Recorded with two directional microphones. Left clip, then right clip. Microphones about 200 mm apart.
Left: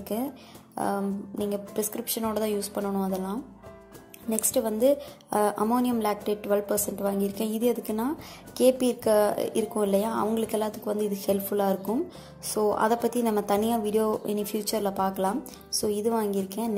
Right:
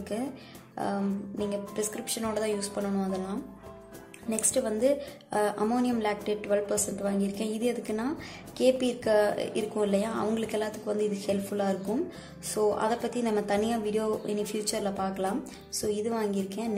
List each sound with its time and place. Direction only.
0.1 s a woman's voice: 25° left (ahead or behind)
1.4 s a woman's voice: 25° left (ahead or behind)